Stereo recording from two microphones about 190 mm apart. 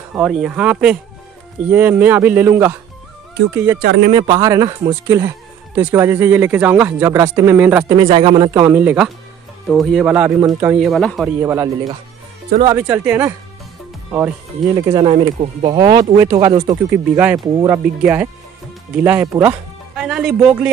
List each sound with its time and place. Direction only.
0.1 s speech: centre (ahead or behind)
3.8 s speech: 60° right (ahead or behind)
4.1 s speech: 20° right (ahead or behind)
8.0 s speech: 25° right (ahead or behind)
8.5 s speech: 15° right (ahead or behind)
10.8 s speech: centre (ahead or behind)
11.4 s speech: 15° right (ahead or behind)
12.7 s speech: 10° right (ahead or behind)